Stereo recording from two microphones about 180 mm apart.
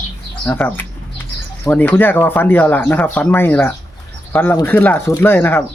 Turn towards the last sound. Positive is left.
turn(degrees=10)  # may be behind; listen again after turning